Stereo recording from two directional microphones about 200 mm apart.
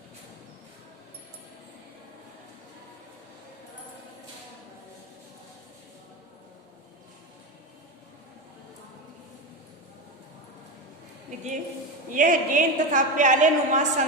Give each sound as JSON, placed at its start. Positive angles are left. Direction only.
{"t": 11.3, "sound": "a woman's voice", "side_deg": -35}